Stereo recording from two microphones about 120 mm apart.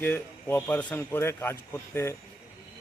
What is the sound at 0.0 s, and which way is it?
Speech, 15° left (ahead or behind).